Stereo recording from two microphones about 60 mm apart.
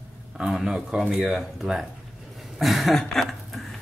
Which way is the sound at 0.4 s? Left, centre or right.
Centre.